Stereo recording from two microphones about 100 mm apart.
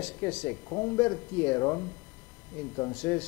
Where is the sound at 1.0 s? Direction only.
15° left (ahead or behind).